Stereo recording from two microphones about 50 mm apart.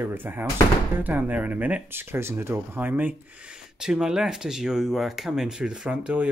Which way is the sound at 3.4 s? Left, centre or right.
Centre.